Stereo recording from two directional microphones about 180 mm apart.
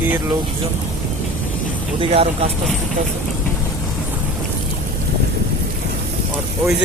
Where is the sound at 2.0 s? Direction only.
35° right (ahead or behind).